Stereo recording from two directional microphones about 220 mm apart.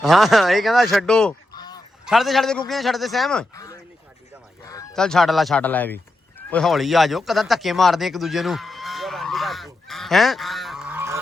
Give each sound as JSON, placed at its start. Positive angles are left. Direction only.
{"t": 0.0, "sound": "speech", "side_deg": 0}
{"t": 1.5, "sound": "goose", "side_deg": 20}
{"t": 2.0, "sound": "speech", "side_deg": 0}
{"t": 3.5, "sound": "speech", "side_deg": 15}
{"t": 4.6, "sound": "honk", "side_deg": 15}
{"t": 4.9, "sound": "speech", "side_deg": 0}